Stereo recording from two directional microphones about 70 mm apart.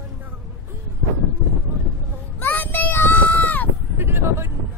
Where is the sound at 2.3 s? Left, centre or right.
Left.